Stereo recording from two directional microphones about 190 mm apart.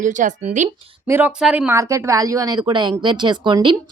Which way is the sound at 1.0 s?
10° right (ahead or behind).